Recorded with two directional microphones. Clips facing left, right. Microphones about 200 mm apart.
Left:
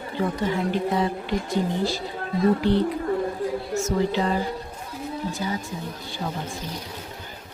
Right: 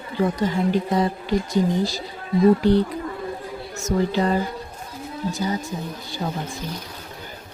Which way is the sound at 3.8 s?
40° right (ahead or behind).